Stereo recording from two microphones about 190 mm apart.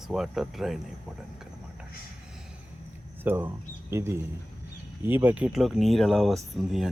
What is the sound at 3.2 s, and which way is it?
Speech, 10° right (ahead or behind).